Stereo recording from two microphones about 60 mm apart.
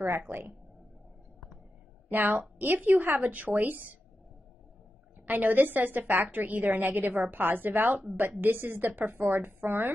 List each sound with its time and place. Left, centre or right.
0.0 s a woman's voice: right
2.0 s a woman's voice: right
5.2 s a woman's voice: right